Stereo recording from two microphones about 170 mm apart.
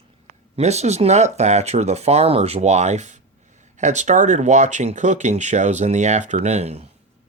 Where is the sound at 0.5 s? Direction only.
40° right (ahead or behind).